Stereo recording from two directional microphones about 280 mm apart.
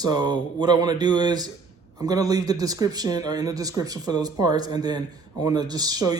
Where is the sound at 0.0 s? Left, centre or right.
Centre.